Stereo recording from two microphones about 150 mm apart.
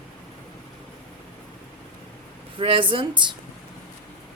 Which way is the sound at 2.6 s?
35° right (ahead or behind).